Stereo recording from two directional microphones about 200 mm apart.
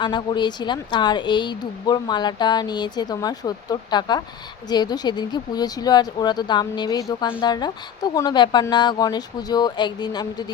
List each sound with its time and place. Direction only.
0.0 s speech: 20° left (ahead or behind)